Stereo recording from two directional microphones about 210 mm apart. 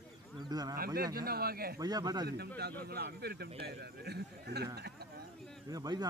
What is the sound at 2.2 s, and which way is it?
Speech, 50° right (ahead or behind).